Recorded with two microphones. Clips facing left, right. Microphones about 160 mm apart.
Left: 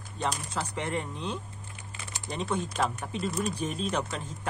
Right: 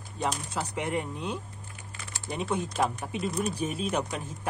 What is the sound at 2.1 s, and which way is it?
Typing, 20° left (ahead or behind).